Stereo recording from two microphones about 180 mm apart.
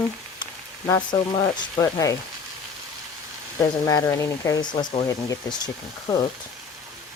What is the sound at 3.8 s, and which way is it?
Speech, 20° left (ahead or behind).